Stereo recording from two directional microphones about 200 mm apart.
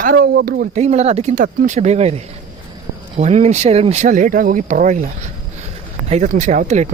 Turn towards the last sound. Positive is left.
turn(degrees=-35)  # may be behind; listen again after turning